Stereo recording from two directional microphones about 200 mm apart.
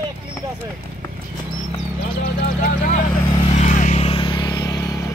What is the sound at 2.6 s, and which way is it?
Speech, 40° left (ahead or behind).